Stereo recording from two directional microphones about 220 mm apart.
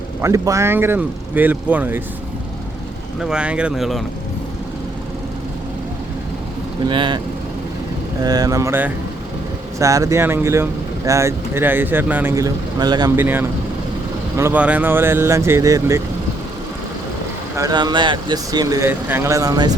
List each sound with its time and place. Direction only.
0.2 s speech: 15° right (ahead or behind)
3.2 s speech: 5° right (ahead or behind)
6.8 s speech: 20° right (ahead or behind)
8.2 s speech: 15° right (ahead or behind)
17.6 s speech: 15° right (ahead or behind)